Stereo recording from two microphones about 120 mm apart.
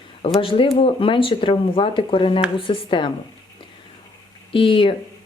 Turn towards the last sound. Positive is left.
turn(degrees=45)  # may be behind; listen again after turning